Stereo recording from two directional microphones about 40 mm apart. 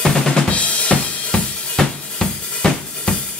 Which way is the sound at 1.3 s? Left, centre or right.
Centre.